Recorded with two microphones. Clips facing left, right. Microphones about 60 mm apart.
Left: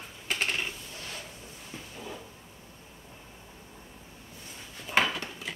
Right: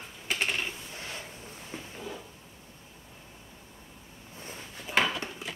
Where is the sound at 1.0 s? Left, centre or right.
Right.